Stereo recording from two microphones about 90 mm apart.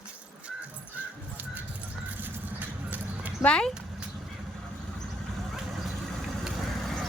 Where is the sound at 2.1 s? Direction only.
20° right (ahead or behind).